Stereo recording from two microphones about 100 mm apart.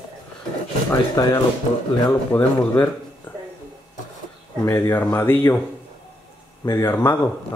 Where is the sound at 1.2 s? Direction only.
35° left (ahead or behind).